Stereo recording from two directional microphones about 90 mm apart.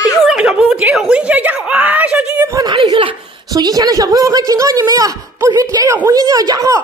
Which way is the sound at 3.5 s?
45° right (ahead or behind).